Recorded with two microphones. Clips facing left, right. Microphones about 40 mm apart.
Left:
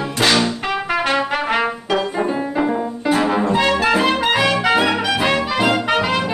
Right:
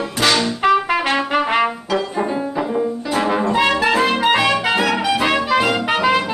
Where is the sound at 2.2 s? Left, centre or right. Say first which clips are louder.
Left 1 dB; centre.